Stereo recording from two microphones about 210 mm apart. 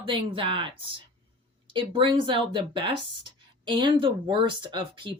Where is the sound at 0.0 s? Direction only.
25° right (ahead or behind).